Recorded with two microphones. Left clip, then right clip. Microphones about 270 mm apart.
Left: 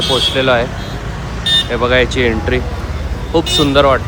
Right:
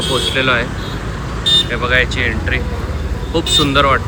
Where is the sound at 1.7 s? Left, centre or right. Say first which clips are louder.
Left 2 dB; centre.